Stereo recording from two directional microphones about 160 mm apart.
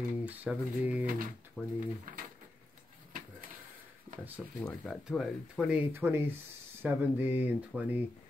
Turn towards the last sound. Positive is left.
turn(degrees=-10)  # may be behind; listen again after turning